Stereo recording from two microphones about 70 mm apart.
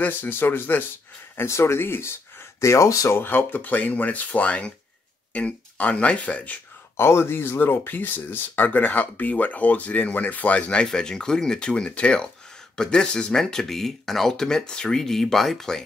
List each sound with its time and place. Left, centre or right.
0.0 s speech: left
3.2 s speech: left
7.0 s speech: left; by 15.8 s centre